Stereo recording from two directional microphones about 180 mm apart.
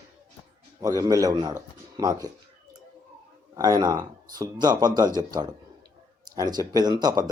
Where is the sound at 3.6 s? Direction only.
20° right (ahead or behind).